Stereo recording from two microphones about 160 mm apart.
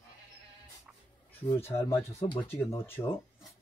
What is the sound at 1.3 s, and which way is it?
Speech, 15° left (ahead or behind).